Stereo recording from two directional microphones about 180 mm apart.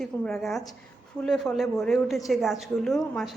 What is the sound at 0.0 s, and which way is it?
A woman's voice, centre (ahead or behind).